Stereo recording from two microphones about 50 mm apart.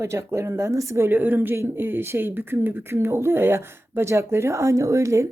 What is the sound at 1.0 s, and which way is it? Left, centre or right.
Speech, right.